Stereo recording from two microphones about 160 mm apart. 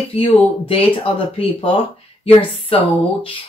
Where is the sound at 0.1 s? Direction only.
35° left (ahead or behind).